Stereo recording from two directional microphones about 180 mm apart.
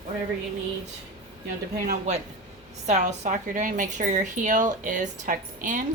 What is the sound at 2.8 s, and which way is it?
Speech, 40° right (ahead or behind).